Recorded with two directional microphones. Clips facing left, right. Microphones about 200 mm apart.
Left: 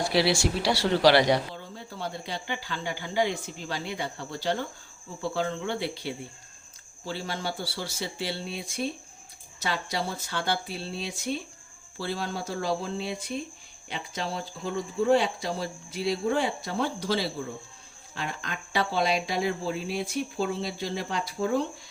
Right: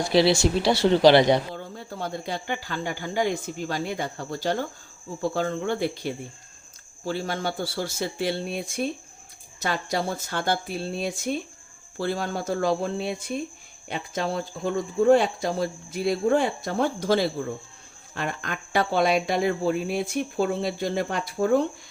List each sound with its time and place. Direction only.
0.1 s speech: 20° right (ahead or behind)
1.5 s speech: 50° right (ahead or behind)